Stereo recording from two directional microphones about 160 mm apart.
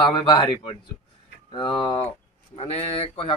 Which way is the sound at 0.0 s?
30° left (ahead or behind).